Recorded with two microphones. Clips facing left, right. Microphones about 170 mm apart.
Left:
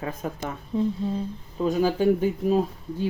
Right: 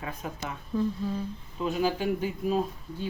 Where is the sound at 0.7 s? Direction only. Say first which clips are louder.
Left 3 dB; 25° left (ahead or behind).